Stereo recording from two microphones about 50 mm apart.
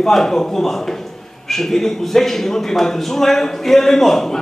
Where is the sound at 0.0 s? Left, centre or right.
Centre.